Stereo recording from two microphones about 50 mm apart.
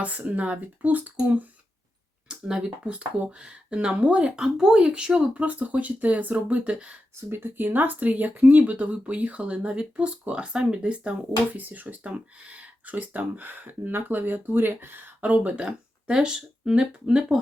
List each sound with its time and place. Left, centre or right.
0.0 s speech: right
2.2 s speech: centre
5.4 s speech: right
7.2 s speech: right
11.5 s speech: right
15.2 s speech: right